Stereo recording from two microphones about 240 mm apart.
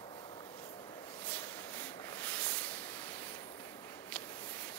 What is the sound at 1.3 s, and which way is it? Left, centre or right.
Rub, centre.